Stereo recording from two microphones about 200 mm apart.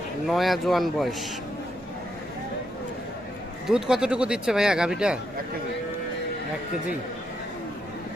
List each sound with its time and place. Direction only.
0.3 s speech: centre (ahead or behind)
3.7 s speech: 5° right (ahead or behind)